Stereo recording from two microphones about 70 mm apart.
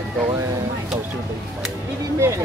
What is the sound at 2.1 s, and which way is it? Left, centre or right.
Speech, right.